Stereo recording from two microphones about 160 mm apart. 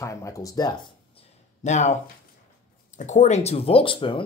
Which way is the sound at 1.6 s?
45° left (ahead or behind).